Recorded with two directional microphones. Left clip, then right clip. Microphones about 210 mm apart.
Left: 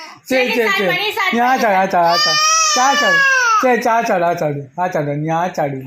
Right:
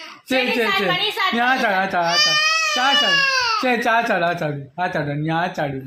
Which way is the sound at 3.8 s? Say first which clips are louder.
Left 3 dB; centre (ahead or behind).